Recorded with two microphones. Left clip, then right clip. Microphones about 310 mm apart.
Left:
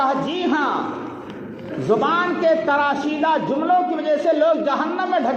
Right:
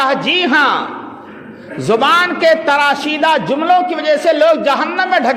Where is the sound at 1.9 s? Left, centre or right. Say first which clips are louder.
Right 7 dB; right.